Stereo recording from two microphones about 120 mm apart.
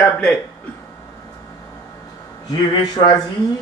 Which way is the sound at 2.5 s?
40° left (ahead or behind).